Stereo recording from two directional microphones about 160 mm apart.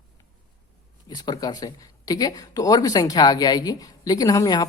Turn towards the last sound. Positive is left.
turn(degrees=25)  # may be behind; listen again after turning